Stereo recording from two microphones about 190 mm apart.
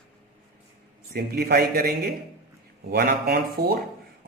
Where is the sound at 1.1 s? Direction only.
55° right (ahead or behind).